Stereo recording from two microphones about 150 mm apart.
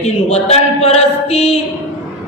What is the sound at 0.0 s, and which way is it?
A woman's voice, 45° left (ahead or behind).